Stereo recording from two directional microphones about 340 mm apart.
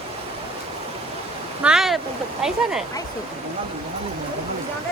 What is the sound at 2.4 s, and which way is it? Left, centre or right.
Speech, centre.